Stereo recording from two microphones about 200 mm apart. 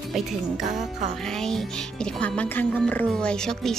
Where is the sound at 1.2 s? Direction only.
5° left (ahead or behind).